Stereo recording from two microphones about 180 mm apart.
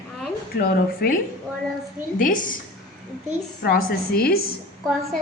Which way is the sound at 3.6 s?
55° left (ahead or behind).